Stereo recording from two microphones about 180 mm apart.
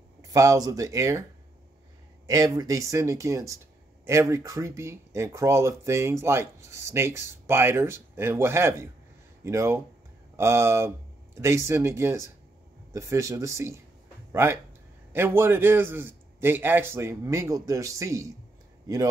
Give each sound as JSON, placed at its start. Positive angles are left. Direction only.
{"t": 0.3, "sound": "speech", "side_deg": -20}
{"t": 2.2, "sound": "a man's voice", "side_deg": -20}